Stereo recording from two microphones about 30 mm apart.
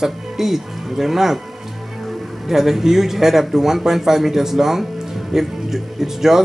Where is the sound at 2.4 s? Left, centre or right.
Centre.